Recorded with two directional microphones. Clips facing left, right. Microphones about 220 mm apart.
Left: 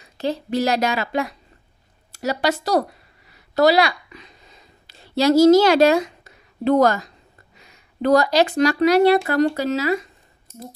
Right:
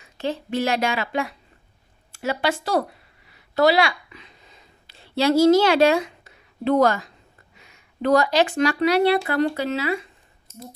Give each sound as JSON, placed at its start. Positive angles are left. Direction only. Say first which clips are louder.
{"t": 0.0, "sound": "a woman's voice", "louder": "left 3 dB", "side_deg": 40}
{"t": 3.3, "sound": "a sound", "louder": "left 2 dB", "side_deg": 40}
{"t": 7.5, "sound": "speech", "louder": "left 4 dB", "side_deg": 40}